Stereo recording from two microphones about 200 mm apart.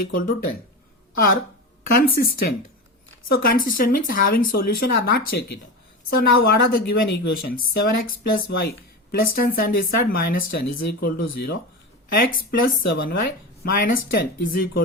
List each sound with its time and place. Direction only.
0.1 s speech: 45° left (ahead or behind)
1.9 s speech: 45° left (ahead or behind)